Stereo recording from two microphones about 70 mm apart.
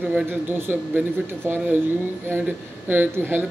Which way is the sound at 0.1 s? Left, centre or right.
Right.